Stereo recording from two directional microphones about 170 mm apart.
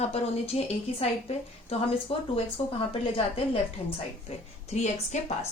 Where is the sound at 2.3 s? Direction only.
35° left (ahead or behind).